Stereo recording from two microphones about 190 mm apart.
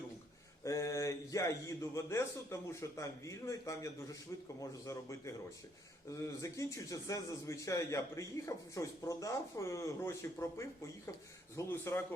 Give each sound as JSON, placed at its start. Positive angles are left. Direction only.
{"t": 0.6, "sound": "a man's voice", "side_deg": 15}
{"t": 6.4, "sound": "a man's voice", "side_deg": 15}